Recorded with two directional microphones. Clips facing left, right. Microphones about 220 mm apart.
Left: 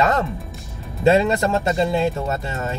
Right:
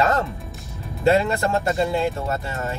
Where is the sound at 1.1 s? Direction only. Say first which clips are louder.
Left 2 dB; 20° left (ahead or behind).